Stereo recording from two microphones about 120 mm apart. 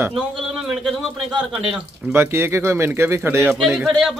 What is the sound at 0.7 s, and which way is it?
A man's voice, centre (ahead or behind).